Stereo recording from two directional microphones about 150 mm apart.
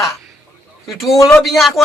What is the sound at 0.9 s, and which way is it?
Speech, centre (ahead or behind).